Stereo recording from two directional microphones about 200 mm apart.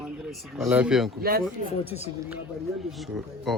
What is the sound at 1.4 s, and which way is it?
Speech, 10° right (ahead or behind).